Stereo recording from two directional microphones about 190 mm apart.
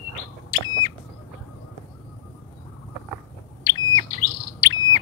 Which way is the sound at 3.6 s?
20° left (ahead or behind).